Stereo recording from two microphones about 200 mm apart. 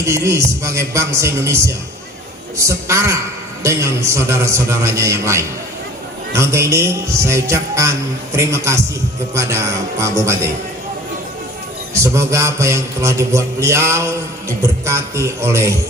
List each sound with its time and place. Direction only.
0.0 s a man's voice: 15° right (ahead or behind)
11.9 s a man's voice: 15° right (ahead or behind)